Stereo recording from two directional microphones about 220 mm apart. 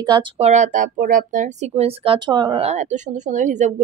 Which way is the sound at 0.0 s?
20° right (ahead or behind).